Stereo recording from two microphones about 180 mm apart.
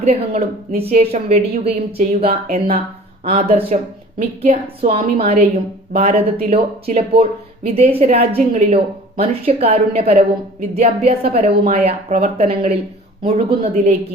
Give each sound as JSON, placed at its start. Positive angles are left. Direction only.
{"t": 0.0, "sound": "a woman's voice", "side_deg": -35}
{"t": 2.3, "sound": "speech", "side_deg": -50}
{"t": 3.2, "sound": "a woman's voice", "side_deg": -35}